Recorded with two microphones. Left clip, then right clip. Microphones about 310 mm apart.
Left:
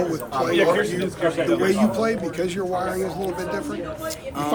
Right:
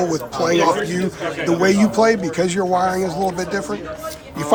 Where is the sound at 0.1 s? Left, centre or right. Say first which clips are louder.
Right 4 dB; centre.